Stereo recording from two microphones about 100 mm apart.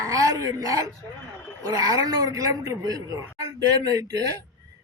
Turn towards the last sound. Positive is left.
turn(degrees=-40)  # may be behind; listen again after turning